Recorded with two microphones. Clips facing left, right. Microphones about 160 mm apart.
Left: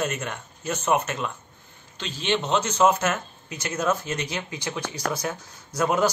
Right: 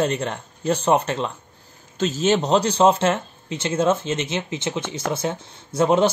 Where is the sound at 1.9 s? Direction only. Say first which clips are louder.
Right 7 dB; 45° right (ahead or behind).